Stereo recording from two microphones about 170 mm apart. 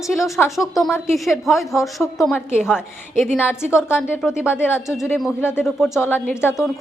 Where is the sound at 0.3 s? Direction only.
15° left (ahead or behind).